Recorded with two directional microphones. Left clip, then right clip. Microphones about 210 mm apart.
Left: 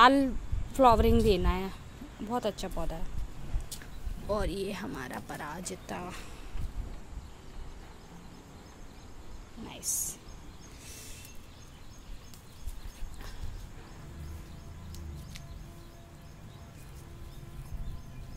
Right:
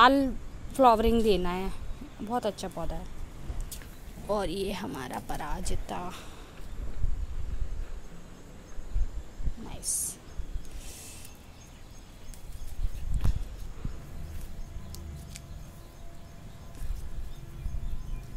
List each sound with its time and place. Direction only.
0.0 s speech: centre (ahead or behind)
4.3 s speech: 5° right (ahead or behind)
9.7 s speech: centre (ahead or behind)